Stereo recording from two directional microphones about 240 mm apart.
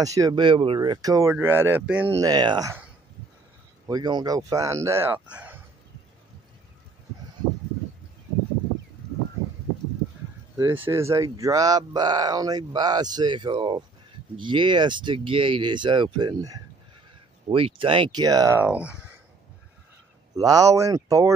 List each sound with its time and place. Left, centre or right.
0.0 s speech: centre
3.8 s speech: centre
10.6 s speech: centre
20.3 s speech: centre